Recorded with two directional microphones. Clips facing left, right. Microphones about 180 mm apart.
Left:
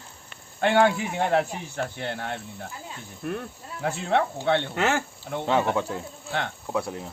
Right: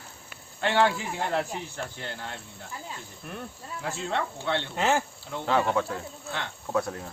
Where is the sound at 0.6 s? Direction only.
55° left (ahead or behind).